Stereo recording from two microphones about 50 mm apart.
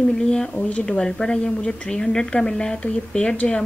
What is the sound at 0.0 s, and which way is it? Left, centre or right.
A woman's voice, centre.